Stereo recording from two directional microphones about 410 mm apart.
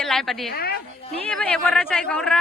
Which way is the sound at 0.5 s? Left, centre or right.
Left.